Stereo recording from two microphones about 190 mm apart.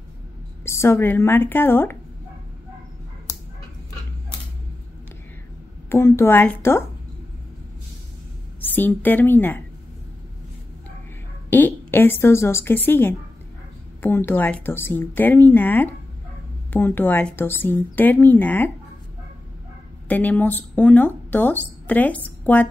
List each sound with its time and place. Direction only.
0.7 s speech: 15° left (ahead or behind)
3.3 s dog: 15° left (ahead or behind)
5.9 s speech: 15° left (ahead or behind)
8.5 s a woman's voice: 10° left (ahead or behind)
11.5 s speech: 10° left (ahead or behind)
20.1 s speech: 10° left (ahead or behind)